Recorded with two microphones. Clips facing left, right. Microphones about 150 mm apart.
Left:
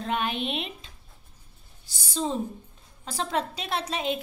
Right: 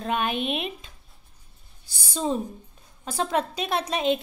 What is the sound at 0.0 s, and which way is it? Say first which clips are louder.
Speech: right 2 dB; 15° right (ahead or behind).